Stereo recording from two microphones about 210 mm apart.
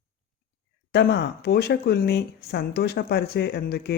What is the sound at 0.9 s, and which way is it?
Speech, 50° left (ahead or behind).